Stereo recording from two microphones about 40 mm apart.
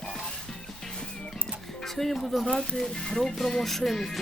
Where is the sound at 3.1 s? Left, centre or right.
Centre.